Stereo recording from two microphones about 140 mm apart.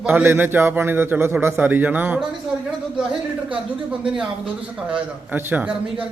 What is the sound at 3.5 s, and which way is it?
A man's voice, 10° right (ahead or behind).